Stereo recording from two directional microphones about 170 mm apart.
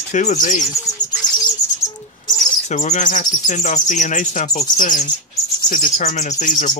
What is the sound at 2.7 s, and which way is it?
Speech, 45° left (ahead or behind).